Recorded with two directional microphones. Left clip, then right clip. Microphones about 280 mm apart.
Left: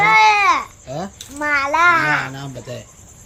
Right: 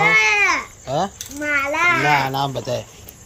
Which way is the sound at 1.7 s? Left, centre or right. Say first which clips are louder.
Left 5 dB; left.